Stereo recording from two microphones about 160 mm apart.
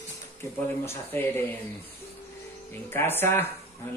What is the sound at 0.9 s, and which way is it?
Speech, 15° left (ahead or behind).